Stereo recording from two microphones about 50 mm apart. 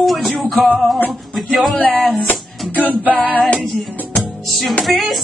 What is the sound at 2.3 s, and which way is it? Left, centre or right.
Music, left.